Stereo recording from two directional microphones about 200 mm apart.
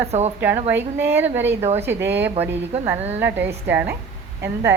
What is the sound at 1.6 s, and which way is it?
A woman's voice, 30° right (ahead or behind).